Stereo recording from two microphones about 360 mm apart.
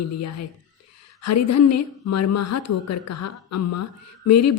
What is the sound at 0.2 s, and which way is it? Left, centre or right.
A woman's voice, left.